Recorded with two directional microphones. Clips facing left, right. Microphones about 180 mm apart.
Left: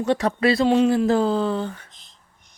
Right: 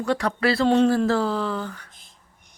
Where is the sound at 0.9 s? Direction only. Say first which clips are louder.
Left 3 dB; 20° left (ahead or behind).